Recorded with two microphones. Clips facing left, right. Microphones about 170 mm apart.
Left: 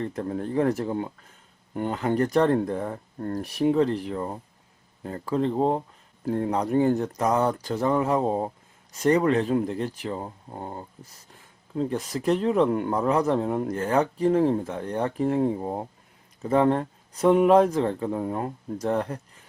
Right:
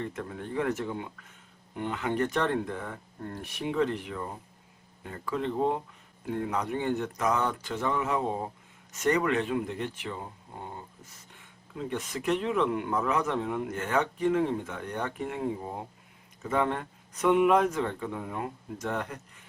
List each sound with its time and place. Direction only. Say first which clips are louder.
0.0 s speech: left 7 dB; 35° left (ahead or behind)